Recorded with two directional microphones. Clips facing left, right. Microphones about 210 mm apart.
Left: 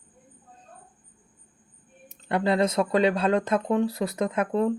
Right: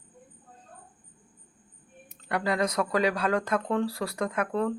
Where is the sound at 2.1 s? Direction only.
25° left (ahead or behind).